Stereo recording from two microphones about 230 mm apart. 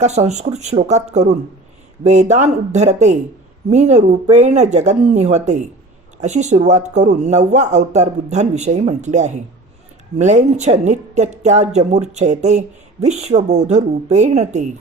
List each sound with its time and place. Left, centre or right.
0.0 s a woman's voice: right